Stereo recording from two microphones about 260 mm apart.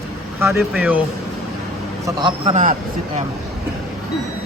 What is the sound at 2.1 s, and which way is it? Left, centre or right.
A man's voice, centre.